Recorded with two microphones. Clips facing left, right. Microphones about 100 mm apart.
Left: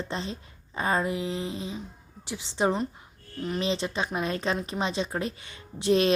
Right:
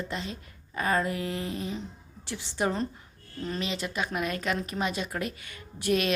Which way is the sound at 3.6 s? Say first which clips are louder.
Left 4 dB; 30° left (ahead or behind).